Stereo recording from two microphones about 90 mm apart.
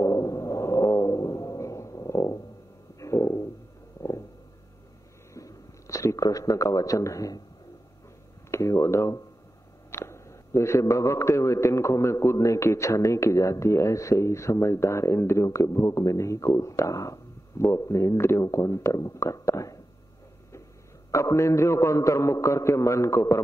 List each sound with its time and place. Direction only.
0.0 s a sound: 35° left (ahead or behind)
5.3 s a man's voice: 35° left (ahead or behind)
8.5 s a man's voice: 35° left (ahead or behind)
21.1 s a man's voice: 35° left (ahead or behind)